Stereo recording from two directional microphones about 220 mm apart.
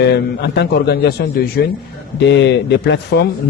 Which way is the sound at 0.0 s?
50° left (ahead or behind).